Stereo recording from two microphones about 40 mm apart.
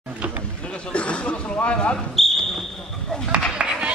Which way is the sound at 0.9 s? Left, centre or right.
Left.